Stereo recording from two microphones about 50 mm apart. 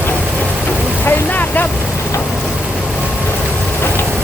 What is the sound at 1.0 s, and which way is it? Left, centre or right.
Boat, left.